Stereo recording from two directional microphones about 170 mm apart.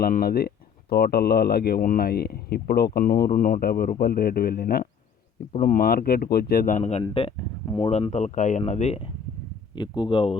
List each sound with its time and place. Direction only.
0.0 s speech: 60° left (ahead or behind); by 7.0 s 45° left (ahead or behind)
7.0 s speech: 35° left (ahead or behind)
9.7 s speech: 25° left (ahead or behind)